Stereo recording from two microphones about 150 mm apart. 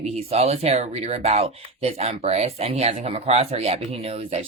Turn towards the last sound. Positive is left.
turn(degrees=-40)  # may be behind; listen again after turning